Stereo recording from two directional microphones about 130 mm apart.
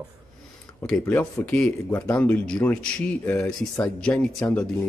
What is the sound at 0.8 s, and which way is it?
Speech, 5° left (ahead or behind).